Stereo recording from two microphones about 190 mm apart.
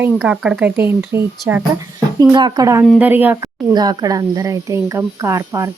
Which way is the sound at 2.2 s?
20° right (ahead or behind).